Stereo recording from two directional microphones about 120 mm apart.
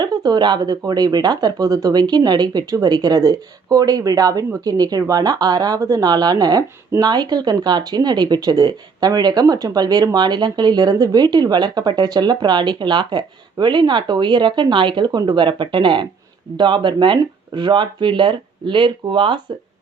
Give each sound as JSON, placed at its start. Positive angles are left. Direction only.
{"t": 0.0, "sound": "speech", "side_deg": -35}